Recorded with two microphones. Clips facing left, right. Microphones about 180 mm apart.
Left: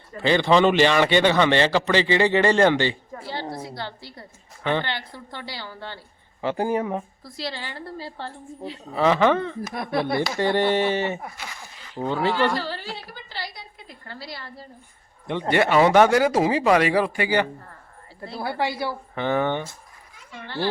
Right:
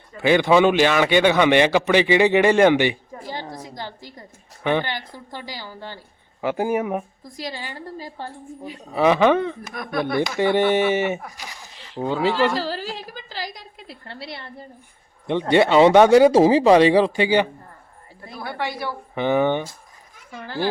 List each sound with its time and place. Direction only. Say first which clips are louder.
0.2 s a man's voice: right 2 dB; 10° right (ahead or behind)
9.7 s speech: left 1 dB; 30° left (ahead or behind)
10.3 s a man's voice: right 3 dB; 20° right (ahead or behind)
12.8 s a woman's voice: right 4 dB; 90° right
14.3 s speech: right 2 dB; 25° right (ahead or behind)
18.3 s speech: left 2 dB; 30° left (ahead or behind)
19.1 s a man's voice: right 5 dB; 15° right (ahead or behind)